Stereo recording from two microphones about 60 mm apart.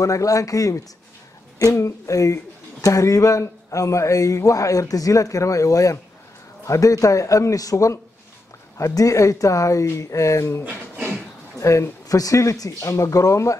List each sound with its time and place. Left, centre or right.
0.0 s speech: left
1.6 s speech: left
10.6 s a sound: right
11.6 s speech: left